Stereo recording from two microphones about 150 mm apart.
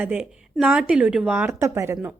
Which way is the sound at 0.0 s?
10° right (ahead or behind).